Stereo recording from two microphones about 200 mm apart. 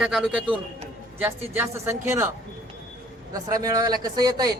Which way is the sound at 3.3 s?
20° right (ahead or behind).